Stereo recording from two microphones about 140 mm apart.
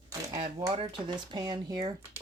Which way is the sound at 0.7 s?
40° right (ahead or behind).